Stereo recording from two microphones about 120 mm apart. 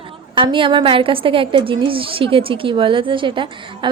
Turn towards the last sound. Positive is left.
turn(degrees=-45)  # may be behind; listen again after turning